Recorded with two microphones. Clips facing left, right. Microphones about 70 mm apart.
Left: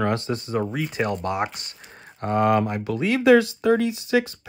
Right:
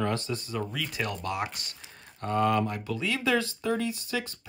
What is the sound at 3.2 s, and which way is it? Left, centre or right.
Speech, left.